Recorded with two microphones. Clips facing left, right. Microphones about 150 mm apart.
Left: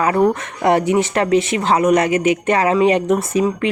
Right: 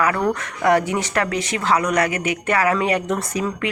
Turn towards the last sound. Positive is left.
turn(degrees=25)  # may be behind; listen again after turning